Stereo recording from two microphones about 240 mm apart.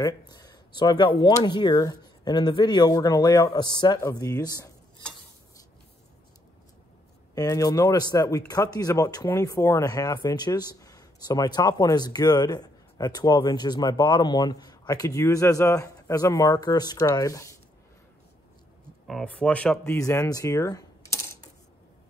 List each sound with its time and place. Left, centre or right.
0.0 s speech: centre
7.3 s speech: centre
19.0 s speech: centre